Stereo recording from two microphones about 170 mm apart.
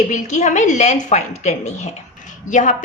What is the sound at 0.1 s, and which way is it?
A woman's voice, 45° left (ahead or behind).